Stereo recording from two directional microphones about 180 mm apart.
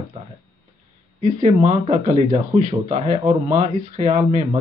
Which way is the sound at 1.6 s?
35° right (ahead or behind).